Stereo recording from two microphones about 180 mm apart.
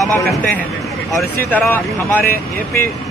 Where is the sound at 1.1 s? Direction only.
10° left (ahead or behind).